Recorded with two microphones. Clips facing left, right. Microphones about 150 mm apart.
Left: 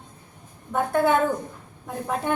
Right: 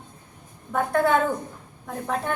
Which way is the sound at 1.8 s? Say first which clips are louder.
Left 1 dB; 5° left (ahead or behind).